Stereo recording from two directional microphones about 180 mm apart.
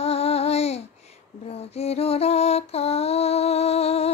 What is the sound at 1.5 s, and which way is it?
Lullaby, 35° left (ahead or behind).